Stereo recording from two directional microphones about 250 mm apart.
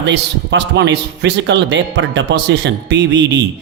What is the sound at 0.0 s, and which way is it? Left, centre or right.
A man's voice, right.